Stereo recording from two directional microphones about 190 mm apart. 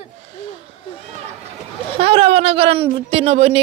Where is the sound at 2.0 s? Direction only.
30° right (ahead or behind).